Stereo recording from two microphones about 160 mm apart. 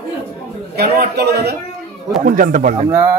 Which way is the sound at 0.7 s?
85° right.